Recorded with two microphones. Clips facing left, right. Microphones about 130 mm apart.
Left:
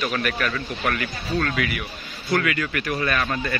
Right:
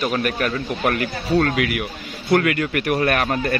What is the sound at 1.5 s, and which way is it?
Speech, 75° right (ahead or behind).